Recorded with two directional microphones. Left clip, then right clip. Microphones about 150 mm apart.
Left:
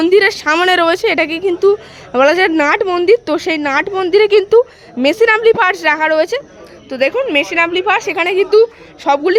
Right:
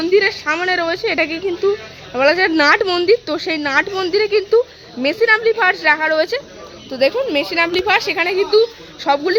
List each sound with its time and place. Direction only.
0.0 s a woman's voice: 50° left (ahead or behind)
2.5 s a woman's voice: 20° left (ahead or behind)
3.1 s a woman's voice: 35° left (ahead or behind)
4.1 s a woman's voice: 45° left (ahead or behind); by 8.2 s 20° left (ahead or behind)
8.2 s a woman's voice: 35° left (ahead or behind)